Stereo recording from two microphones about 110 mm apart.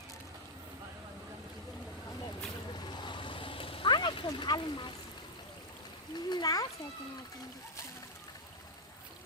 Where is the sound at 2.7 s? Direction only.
40° left (ahead or behind).